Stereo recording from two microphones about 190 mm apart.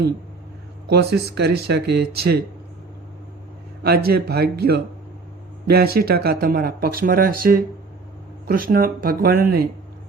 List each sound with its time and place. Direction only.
0.9 s speech: 60° right (ahead or behind)
3.8 s speech: 55° right (ahead or behind)